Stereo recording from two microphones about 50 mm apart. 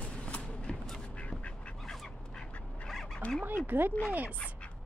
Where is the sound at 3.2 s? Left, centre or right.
Left.